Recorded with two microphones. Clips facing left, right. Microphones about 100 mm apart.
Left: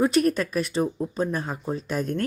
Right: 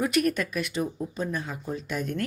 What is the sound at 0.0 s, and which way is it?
Speech, 30° left (ahead or behind).